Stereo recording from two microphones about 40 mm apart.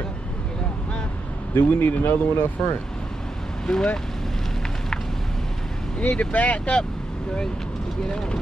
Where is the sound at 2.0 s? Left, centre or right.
Left.